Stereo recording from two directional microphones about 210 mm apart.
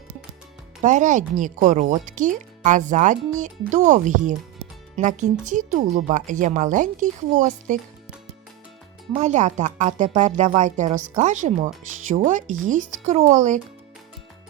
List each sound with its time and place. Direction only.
0.8 s a woman's voice: 35° right (ahead or behind)
9.1 s a woman's voice: 35° right (ahead or behind)